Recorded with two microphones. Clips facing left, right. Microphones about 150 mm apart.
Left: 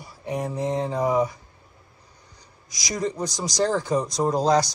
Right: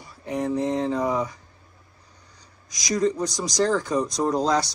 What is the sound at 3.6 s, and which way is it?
Speech, 20° left (ahead or behind).